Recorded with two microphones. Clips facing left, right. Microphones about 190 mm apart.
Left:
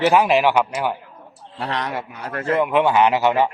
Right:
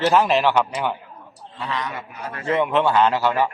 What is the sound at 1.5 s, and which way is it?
Speech, 70° left (ahead or behind).